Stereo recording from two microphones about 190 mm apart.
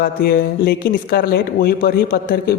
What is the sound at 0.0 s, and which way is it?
Speech, 55° left (ahead or behind).